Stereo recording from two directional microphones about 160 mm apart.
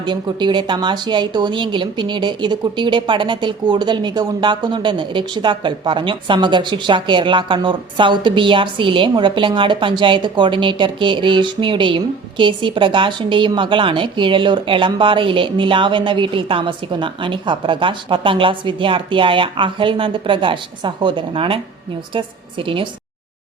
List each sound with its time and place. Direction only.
0.0 s speech: 30° right (ahead or behind)